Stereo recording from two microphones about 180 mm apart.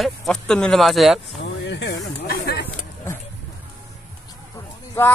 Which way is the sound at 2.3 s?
60° left (ahead or behind).